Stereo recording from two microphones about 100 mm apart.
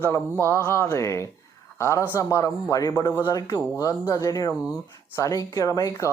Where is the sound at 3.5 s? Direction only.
40° left (ahead or behind).